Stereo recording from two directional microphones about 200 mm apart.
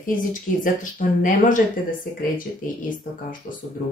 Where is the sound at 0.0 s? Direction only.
40° left (ahead or behind).